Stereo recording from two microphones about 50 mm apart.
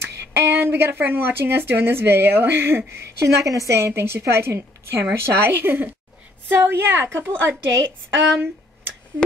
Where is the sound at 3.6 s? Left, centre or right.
Right.